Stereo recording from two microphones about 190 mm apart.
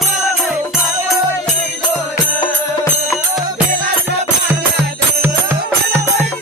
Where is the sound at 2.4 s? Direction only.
25° left (ahead or behind).